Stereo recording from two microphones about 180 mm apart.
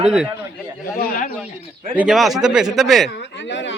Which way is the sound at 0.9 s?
55° left (ahead or behind).